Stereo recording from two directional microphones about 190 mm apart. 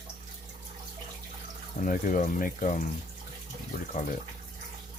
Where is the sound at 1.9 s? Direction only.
45° left (ahead or behind).